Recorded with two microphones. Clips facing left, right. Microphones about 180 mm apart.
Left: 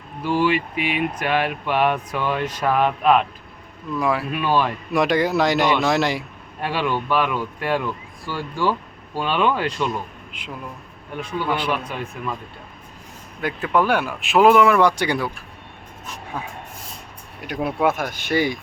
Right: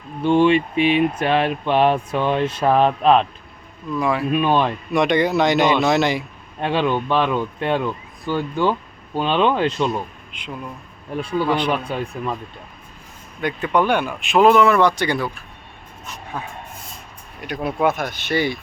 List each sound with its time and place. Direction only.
0.2 s speech: 25° right (ahead or behind)
3.9 s a man's voice: 5° left (ahead or behind)
4.3 s speech: 20° right (ahead or behind)
4.9 s a man's voice: centre (ahead or behind)
6.6 s speech: 20° right (ahead or behind)
10.3 s a man's voice: 5° left (ahead or behind)
11.1 s speech: 30° right (ahead or behind)
11.4 s speech: 5° left (ahead or behind)
11.7 s speech: 30° right (ahead or behind)
13.4 s speech: centre (ahead or behind)
17.4 s speech: 5° left (ahead or behind)